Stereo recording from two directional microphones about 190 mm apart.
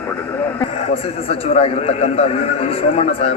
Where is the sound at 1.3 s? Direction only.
30° left (ahead or behind).